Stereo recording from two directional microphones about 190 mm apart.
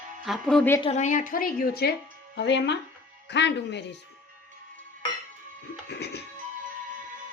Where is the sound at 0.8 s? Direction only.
40° left (ahead or behind).